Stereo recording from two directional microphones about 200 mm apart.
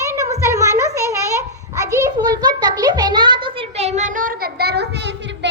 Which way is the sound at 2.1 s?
20° right (ahead or behind).